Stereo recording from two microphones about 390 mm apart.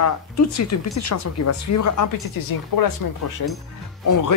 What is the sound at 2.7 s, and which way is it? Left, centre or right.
Speech, left.